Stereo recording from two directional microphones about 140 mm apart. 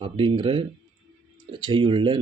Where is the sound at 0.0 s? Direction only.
35° right (ahead or behind).